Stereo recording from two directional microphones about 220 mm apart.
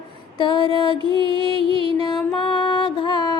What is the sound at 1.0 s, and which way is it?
Music, 20° right (ahead or behind).